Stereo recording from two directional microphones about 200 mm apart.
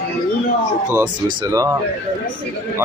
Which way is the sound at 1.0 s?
15° right (ahead or behind).